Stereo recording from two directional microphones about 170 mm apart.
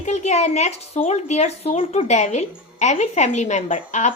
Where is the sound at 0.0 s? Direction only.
40° left (ahead or behind).